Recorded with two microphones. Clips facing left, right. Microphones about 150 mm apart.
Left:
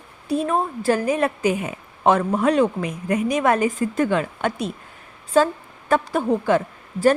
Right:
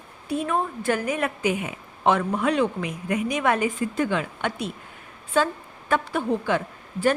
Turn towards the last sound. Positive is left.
turn(degrees=40)  # may be behind; listen again after turning